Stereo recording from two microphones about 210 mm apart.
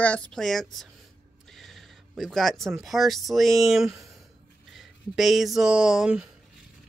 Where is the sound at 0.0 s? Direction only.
5° left (ahead or behind).